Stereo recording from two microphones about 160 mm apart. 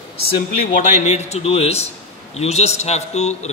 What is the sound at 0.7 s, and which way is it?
A man's voice, 45° left (ahead or behind).